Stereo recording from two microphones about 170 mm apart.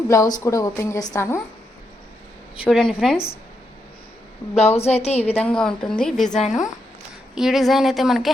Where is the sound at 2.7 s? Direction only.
Centre (ahead or behind).